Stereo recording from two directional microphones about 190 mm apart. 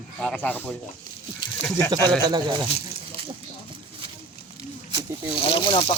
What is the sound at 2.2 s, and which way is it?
Speech, 25° right (ahead or behind).